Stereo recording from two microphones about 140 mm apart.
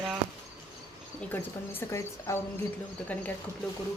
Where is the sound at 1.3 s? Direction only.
20° left (ahead or behind).